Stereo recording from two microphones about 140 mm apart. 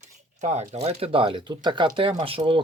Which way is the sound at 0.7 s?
45° right (ahead or behind).